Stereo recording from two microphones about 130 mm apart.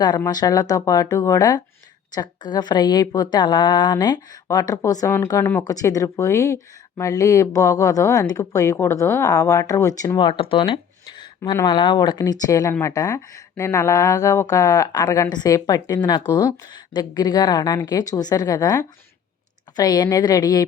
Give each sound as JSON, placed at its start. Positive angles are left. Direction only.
{"t": 0.3, "sound": "a woman's voice", "side_deg": 30}